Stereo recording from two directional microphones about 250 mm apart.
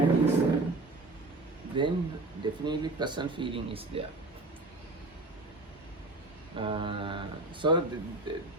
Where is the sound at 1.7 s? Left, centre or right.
Centre.